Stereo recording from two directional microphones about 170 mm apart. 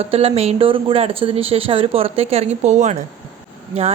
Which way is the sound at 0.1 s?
35° right (ahead or behind).